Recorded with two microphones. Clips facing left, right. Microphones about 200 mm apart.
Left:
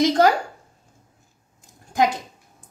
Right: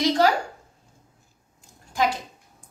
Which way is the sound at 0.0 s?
50° left (ahead or behind).